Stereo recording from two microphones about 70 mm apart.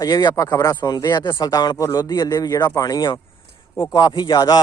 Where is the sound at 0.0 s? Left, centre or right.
Left.